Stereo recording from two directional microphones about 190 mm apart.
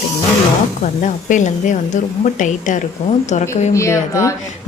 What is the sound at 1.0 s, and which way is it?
A woman's voice, 40° left (ahead or behind).